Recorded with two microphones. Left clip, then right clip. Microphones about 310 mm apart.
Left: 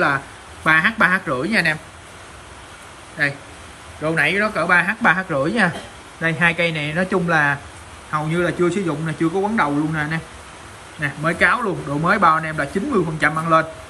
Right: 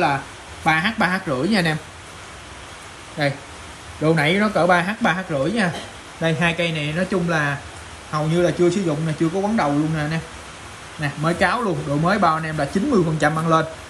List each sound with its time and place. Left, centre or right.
0.7 s a man's voice: centre
4.4 s a man's voice: centre